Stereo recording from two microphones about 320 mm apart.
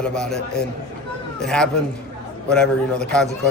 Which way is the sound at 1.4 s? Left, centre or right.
Centre.